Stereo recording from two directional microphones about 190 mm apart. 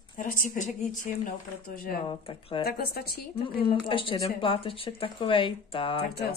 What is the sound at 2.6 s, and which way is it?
Speech, 55° left (ahead or behind).